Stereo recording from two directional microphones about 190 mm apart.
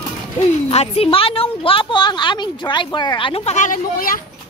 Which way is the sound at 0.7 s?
30° left (ahead or behind).